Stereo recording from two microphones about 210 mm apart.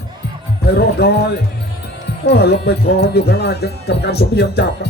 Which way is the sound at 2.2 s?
50° left (ahead or behind).